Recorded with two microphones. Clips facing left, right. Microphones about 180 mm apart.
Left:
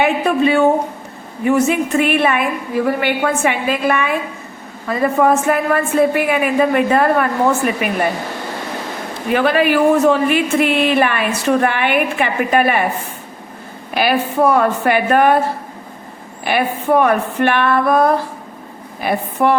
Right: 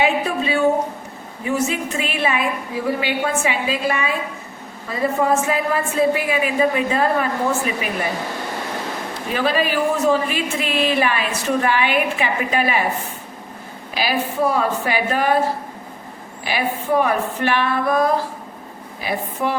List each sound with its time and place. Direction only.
0.0 s a sound: 60° left (ahead or behind)
1.5 s speech: 60° left (ahead or behind)
9.3 s speech: 65° left (ahead or behind)
13.9 s speech: 60° left (ahead or behind)
16.4 s speech: 60° left (ahead or behind)